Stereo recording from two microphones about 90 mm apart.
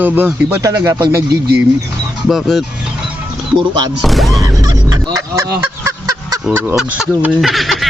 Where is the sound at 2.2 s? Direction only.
Centre (ahead or behind).